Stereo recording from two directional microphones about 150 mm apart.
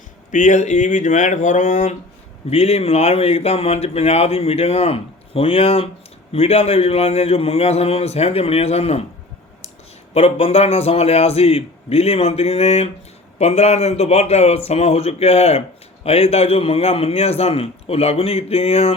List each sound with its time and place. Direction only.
0.3 s speech: 55° left (ahead or behind)
2.5 s speech: 45° left (ahead or behind)
10.2 s speech: 40° left (ahead or behind)